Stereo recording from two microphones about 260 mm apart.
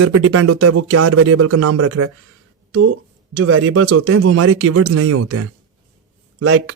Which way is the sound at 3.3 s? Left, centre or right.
Right.